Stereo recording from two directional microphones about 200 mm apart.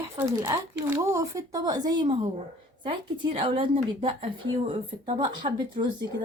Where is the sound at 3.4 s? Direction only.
25° right (ahead or behind).